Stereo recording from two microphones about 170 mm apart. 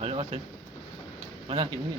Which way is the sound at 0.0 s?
35° right (ahead or behind).